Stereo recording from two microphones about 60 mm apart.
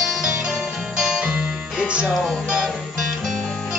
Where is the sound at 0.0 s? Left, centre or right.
Centre.